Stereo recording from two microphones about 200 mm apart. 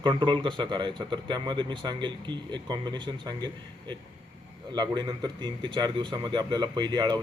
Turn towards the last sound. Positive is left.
turn(degrees=-20)  # may be behind; listen again after turning